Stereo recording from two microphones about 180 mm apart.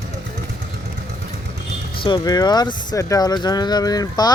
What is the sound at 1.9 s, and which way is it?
Speech, 25° left (ahead or behind).